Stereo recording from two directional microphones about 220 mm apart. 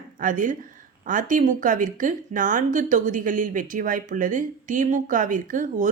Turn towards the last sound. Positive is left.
turn(degrees=-35)  # may be behind; listen again after turning